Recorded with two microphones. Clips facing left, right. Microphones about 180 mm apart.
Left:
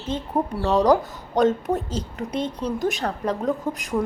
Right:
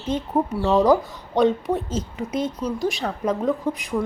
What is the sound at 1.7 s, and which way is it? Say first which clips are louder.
Speech: right 1 dB; 35° left (ahead or behind).